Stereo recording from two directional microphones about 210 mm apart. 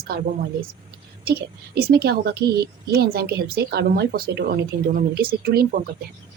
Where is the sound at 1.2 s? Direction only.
50° right (ahead or behind).